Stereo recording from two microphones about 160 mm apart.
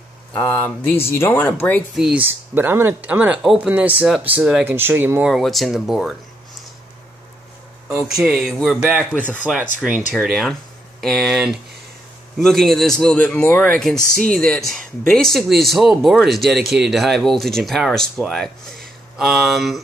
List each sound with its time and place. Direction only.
0.3 s speech: 15° left (ahead or behind)
2.0 s speech: 5° right (ahead or behind)
5.3 s speech: centre (ahead or behind)
8.0 s speech: 5° right (ahead or behind)
10.1 s speech: centre (ahead or behind)
14.1 s speech: 65° right (ahead or behind)
14.4 s speech: centre (ahead or behind)